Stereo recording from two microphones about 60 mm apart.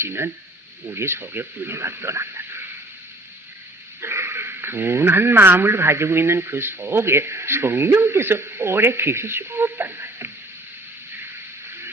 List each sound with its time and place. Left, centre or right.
0.0 s speech: right
4.0 s speech: right